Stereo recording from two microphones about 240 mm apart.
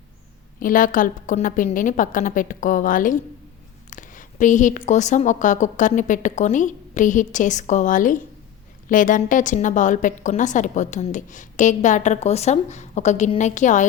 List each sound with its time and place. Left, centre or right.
0.6 s a woman's voice: left